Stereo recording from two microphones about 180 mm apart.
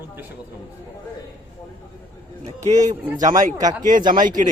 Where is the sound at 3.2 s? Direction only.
45° right (ahead or behind).